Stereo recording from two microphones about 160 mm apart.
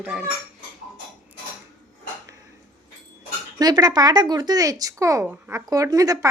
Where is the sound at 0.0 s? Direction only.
10° right (ahead or behind).